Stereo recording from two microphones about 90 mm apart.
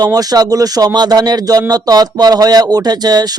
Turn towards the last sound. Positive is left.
turn(degrees=-50)  # may be behind; listen again after turning